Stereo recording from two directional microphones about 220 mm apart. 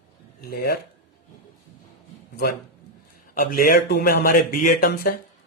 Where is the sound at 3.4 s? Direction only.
40° left (ahead or behind).